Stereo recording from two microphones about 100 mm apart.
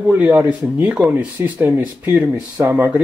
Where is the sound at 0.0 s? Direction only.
20° right (ahead or behind).